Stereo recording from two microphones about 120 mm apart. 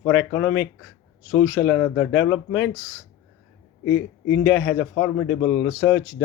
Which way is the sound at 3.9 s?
15° left (ahead or behind).